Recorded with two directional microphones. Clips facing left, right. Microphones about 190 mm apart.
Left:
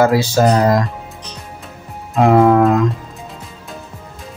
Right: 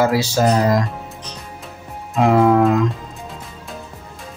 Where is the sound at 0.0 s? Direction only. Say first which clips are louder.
Left 3 dB; 55° left (ahead or behind).